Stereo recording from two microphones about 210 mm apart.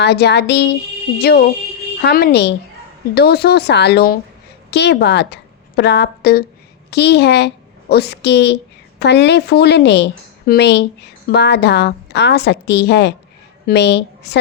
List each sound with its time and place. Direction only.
0.0 s a woman's voice: 50° left (ahead or behind)
2.0 s a woman's voice: 50° left (ahead or behind)